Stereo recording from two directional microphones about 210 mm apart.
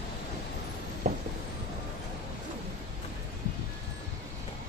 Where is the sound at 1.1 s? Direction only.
35° right (ahead or behind).